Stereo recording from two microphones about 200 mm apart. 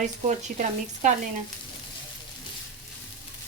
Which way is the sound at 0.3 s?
40° right (ahead or behind).